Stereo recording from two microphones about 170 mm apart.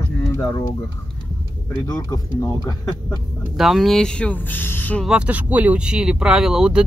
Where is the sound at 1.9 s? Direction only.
20° left (ahead or behind).